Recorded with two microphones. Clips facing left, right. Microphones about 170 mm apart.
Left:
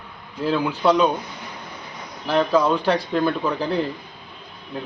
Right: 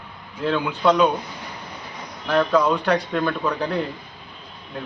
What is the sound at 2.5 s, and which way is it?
Speech, centre (ahead or behind).